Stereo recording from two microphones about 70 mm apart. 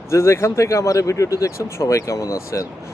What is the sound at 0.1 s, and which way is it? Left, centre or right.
Speech, left.